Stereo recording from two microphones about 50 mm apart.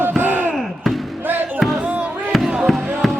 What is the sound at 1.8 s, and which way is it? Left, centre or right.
Music, right.